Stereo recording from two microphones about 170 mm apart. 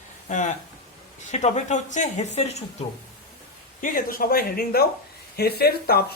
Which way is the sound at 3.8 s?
55° left (ahead or behind).